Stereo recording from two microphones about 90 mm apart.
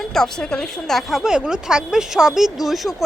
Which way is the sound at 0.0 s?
5° left (ahead or behind).